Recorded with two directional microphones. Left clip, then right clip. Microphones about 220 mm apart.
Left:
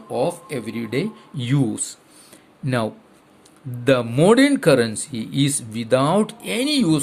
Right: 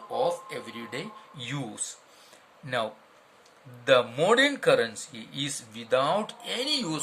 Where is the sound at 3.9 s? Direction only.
35° left (ahead or behind).